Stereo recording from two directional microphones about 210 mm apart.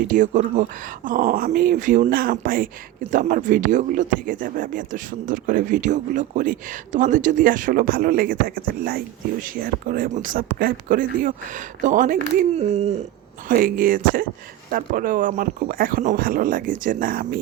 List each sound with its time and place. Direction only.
0.1 s speech: 35° right (ahead or behind)
13.5 s speech: 40° right (ahead or behind)